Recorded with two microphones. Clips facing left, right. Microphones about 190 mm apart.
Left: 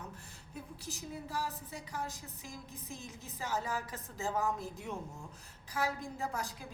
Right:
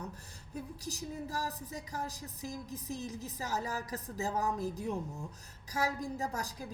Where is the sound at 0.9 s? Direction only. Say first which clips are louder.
Right 2 dB; 40° right (ahead or behind).